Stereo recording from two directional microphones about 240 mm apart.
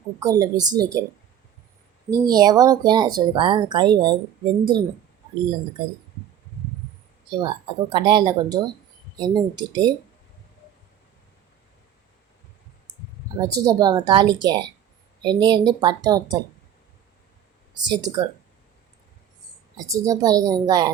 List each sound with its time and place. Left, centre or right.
0.2 s speech: centre
2.0 s speech: centre
7.3 s speech: centre
13.3 s speech: centre
17.8 s speech: centre
19.7 s speech: centre